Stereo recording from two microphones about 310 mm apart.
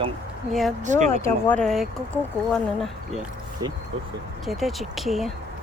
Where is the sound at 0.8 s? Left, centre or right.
Right.